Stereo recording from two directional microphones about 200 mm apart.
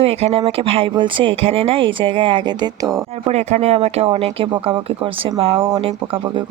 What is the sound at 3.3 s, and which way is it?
Speech, 35° right (ahead or behind).